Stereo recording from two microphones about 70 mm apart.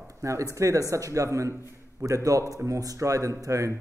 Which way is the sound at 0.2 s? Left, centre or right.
Right.